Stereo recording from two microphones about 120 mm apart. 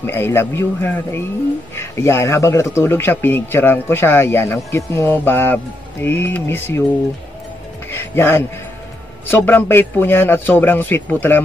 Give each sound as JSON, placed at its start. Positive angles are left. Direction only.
{"t": 0.0, "sound": "a man's voice", "side_deg": 20}
{"t": 7.9, "sound": "music", "side_deg": 20}
{"t": 9.3, "sound": "a man's voice", "side_deg": 20}